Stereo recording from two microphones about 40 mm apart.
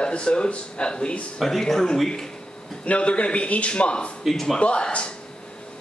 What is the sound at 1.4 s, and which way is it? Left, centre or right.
Speech, centre.